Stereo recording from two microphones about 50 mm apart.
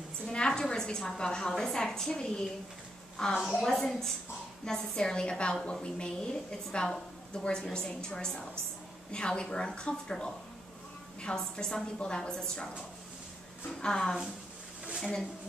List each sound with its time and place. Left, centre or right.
0.3 s a sound: centre
1.5 s a woman's voice: centre
13.7 s a woman's voice: centre